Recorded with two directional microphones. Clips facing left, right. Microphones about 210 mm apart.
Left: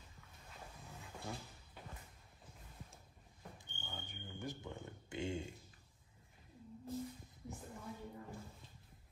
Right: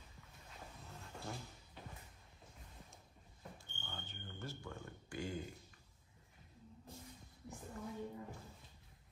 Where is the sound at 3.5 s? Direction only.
10° left (ahead or behind).